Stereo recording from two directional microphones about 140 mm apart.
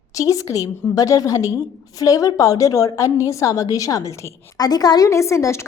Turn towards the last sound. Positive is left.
turn(degrees=20)  # may be behind; listen again after turning